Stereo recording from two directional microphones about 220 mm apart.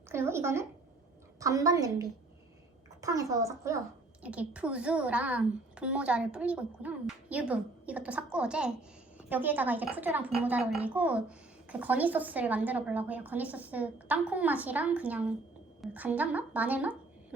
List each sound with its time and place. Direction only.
0.1 s a woman's voice: 10° right (ahead or behind)